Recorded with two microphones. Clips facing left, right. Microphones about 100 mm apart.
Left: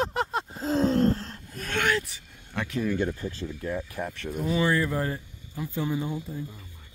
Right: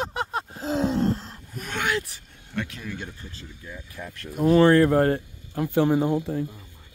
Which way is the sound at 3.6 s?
45° left (ahead or behind).